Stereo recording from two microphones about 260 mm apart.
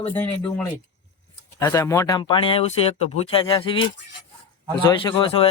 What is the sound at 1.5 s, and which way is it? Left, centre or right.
Speech, centre.